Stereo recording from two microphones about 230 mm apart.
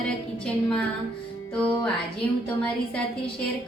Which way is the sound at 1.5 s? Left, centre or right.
Centre.